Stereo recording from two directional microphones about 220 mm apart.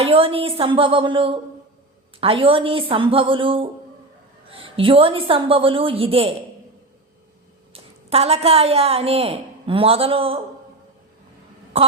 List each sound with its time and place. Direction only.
0.0 s a woman's voice: 25° right (ahead or behind)
7.7 s a woman's voice: 25° right (ahead or behind)